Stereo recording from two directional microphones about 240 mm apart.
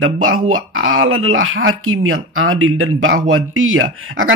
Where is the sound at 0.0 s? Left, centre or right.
Right.